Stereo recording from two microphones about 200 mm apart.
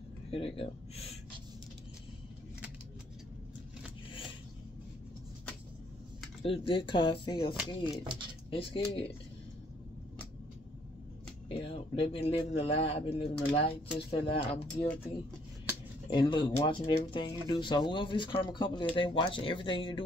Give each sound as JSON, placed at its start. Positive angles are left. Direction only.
{"t": 0.3, "sound": "a man's voice", "side_deg": 30}
{"t": 6.4, "sound": "a man's voice", "side_deg": 25}
{"t": 7.9, "sound": "speech", "side_deg": -25}
{"t": 8.5, "sound": "a man's voice", "side_deg": 25}
{"t": 11.4, "sound": "a man's voice", "side_deg": 25}
{"t": 16.1, "sound": "a man's voice", "side_deg": 25}